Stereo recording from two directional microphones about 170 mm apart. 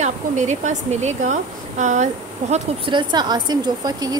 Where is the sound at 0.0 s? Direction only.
45° right (ahead or behind).